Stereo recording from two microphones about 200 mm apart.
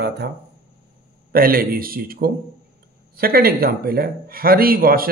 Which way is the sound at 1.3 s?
45° right (ahead or behind).